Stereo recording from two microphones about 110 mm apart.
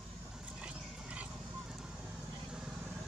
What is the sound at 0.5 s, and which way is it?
Horse, 10° right (ahead or behind).